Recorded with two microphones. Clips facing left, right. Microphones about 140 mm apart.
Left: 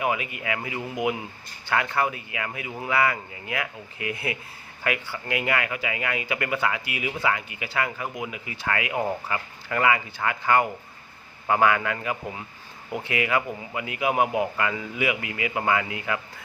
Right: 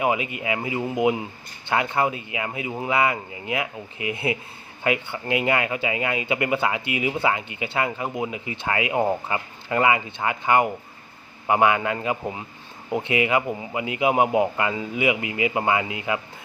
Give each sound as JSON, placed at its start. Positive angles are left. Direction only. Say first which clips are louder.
{"t": 0.0, "sound": "speech", "louder": "right 3 dB", "side_deg": -20}